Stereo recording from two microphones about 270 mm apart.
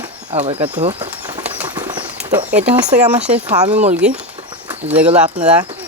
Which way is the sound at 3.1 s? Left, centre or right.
Centre.